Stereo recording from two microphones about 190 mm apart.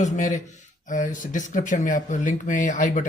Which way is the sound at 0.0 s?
40° left (ahead or behind).